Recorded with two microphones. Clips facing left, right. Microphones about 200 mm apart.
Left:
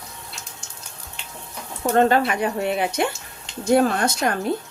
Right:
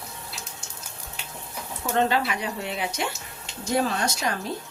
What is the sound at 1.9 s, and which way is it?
A woman's voice, 50° left (ahead or behind).